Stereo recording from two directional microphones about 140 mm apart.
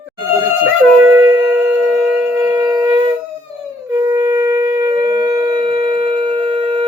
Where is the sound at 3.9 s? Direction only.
25° right (ahead or behind).